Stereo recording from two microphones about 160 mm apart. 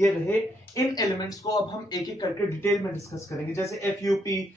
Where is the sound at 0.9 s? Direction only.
25° left (ahead or behind).